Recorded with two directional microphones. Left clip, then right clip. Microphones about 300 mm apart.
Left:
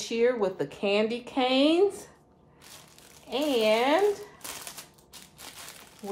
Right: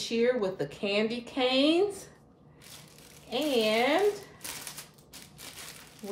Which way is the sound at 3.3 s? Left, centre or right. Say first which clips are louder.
Left 3 dB; centre.